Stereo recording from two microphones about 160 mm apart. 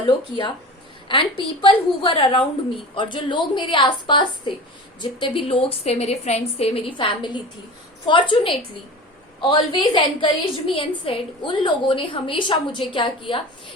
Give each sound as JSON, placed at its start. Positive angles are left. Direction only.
{"t": 0.0, "sound": "a woman's voice", "side_deg": 30}